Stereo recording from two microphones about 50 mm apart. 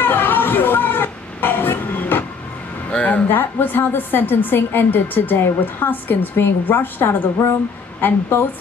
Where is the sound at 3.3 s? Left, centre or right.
Left.